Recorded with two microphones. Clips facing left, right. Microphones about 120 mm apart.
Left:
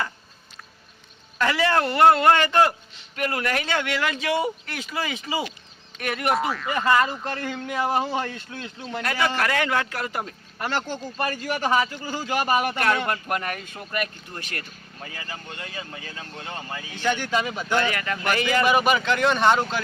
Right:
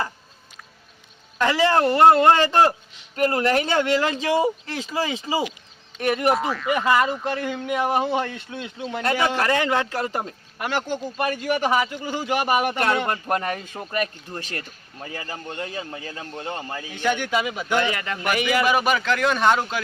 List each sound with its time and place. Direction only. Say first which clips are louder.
1.4 s a man's voice: right 3 dB; 25° right (ahead or behind)
6.3 s speech: right 1 dB; centre (ahead or behind)
6.7 s a man's voice: right 2 dB; 10° right (ahead or behind); by 10.3 s 30° right (ahead or behind)
10.6 s a man's voice: right 2 dB; 10° right (ahead or behind); by 16.8 s 30° right (ahead or behind)
16.9 s a man's voice: right 1 dB; 10° right (ahead or behind)